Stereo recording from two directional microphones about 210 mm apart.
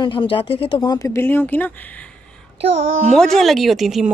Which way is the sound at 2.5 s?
30° right (ahead or behind).